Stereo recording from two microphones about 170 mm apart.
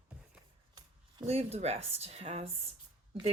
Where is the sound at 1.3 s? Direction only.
35° right (ahead or behind).